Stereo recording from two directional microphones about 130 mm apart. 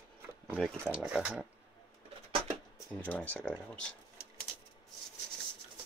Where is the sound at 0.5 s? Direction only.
5° right (ahead or behind).